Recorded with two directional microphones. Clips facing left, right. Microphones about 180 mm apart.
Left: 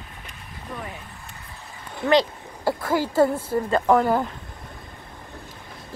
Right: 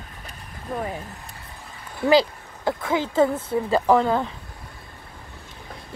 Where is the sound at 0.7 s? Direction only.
50° right (ahead or behind).